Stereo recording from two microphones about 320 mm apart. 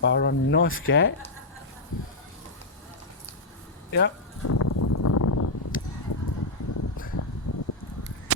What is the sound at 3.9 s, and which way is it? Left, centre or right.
Speech, left.